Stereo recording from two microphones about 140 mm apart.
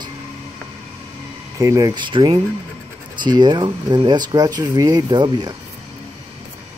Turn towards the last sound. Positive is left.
turn(degrees=-30)  # may be behind; listen again after turning